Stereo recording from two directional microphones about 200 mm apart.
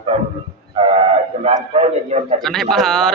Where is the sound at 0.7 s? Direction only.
25° right (ahead or behind).